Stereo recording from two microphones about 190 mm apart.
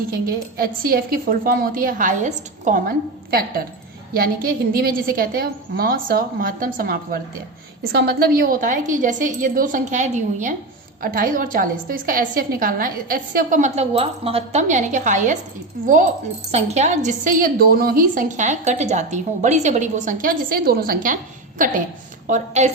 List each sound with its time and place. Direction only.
0.1 s a woman's voice: 50° right (ahead or behind)
16.5 s a woman's voice: 35° right (ahead or behind)
22.3 s a woman's voice: 40° right (ahead or behind)